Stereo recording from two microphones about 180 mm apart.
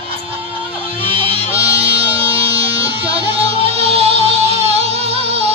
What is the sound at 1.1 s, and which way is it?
Music, 30° right (ahead or behind).